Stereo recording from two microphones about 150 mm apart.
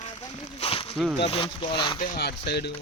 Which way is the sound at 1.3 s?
35° left (ahead or behind).